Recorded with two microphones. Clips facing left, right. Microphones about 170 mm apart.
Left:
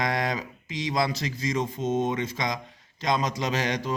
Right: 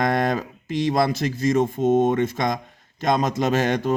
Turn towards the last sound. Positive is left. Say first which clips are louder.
# right 7 dB
turn(degrees=-55)  # may be behind; listen again after turning